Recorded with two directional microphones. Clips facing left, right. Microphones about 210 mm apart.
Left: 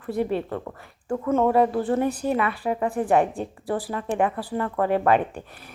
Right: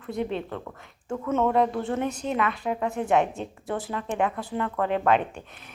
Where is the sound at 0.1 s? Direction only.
5° left (ahead or behind).